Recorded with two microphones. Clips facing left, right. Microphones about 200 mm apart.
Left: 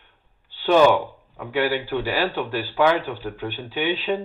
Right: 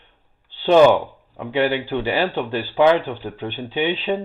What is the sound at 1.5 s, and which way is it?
Speech, 25° right (ahead or behind).